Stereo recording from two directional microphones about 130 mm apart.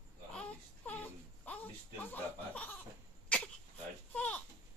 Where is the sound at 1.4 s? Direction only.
15° left (ahead or behind).